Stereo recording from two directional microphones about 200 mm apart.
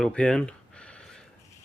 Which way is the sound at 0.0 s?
5° left (ahead or behind).